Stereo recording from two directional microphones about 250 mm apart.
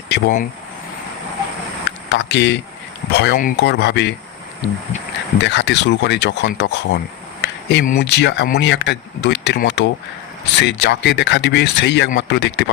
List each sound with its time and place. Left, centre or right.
0.1 s speech: left
2.0 s speech: left
5.4 s speech: left